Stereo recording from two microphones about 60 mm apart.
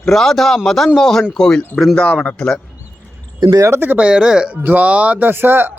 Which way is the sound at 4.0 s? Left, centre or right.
Centre.